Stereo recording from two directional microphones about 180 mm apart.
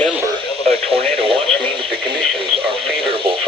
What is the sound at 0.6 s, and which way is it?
Radio, 35° right (ahead or behind).